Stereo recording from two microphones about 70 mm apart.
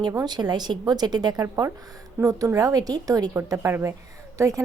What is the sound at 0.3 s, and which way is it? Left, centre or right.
Speech, right.